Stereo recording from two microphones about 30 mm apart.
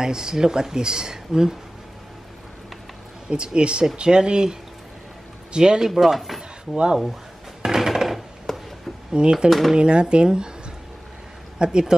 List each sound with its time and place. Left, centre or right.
0.0 s speech: right
3.3 s speech: right
5.9 s speech: centre
7.6 s a sound: centre
8.5 s a sound: centre
9.1 s speech: right
9.5 s speech: centre
9.8 s speech: right
11.5 s a sound: right